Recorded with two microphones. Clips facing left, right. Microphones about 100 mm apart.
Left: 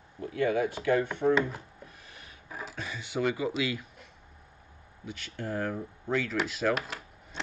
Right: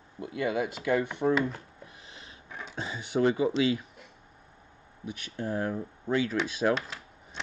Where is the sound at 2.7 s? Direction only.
25° right (ahead or behind).